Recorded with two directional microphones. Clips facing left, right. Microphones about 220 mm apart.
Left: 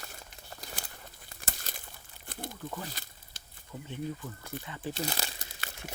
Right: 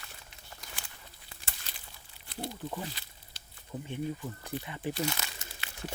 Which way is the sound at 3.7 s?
35° right (ahead or behind).